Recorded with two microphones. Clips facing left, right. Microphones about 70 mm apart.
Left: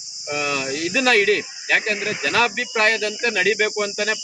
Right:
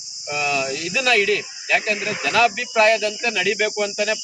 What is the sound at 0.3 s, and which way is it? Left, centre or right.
Speech, left.